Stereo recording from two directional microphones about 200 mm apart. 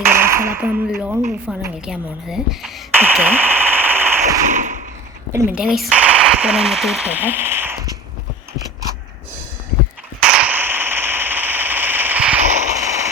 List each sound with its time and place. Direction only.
0.0 s speech: 10° right (ahead or behind)
0.9 s a woman's voice: centre (ahead or behind)
4.5 s a sound: 40° right (ahead or behind)
5.3 s speech: 10° right (ahead or behind)
10.2 s a sound: 5° right (ahead or behind)
12.8 s firecracker: 15° right (ahead or behind)